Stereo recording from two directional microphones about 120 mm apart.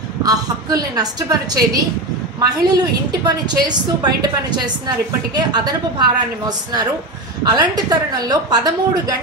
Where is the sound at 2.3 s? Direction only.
35° right (ahead or behind).